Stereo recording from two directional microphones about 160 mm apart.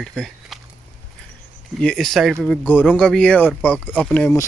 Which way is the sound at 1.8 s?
5° left (ahead or behind).